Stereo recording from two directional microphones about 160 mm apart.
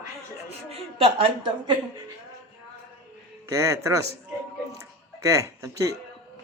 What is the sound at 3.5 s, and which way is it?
Speech, 20° right (ahead or behind).